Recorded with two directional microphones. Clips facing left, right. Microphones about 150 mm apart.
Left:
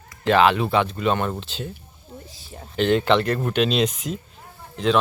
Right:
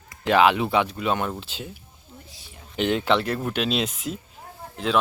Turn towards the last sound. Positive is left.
turn(degrees=-5)  # may be behind; listen again after turning